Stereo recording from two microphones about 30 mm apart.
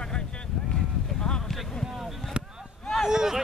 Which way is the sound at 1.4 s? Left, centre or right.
Centre.